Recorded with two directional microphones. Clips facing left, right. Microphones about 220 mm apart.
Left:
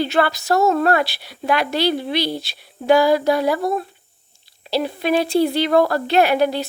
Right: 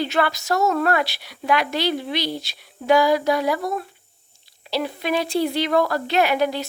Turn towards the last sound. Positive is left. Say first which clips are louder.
# left 4 dB
turn(degrees=30)  # may be behind; listen again after turning